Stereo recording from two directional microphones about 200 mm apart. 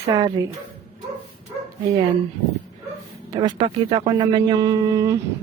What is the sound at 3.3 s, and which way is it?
Speech, 20° right (ahead or behind).